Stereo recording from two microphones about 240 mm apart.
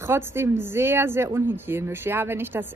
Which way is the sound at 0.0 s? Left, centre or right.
Centre.